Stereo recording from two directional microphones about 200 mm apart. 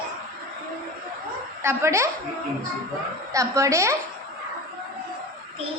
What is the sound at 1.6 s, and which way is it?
Speech, 15° right (ahead or behind).